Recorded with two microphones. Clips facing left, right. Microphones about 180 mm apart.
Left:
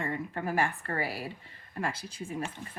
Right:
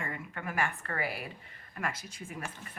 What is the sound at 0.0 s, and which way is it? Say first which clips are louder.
A woman's voice: left 6 dB; 30° left (ahead or behind).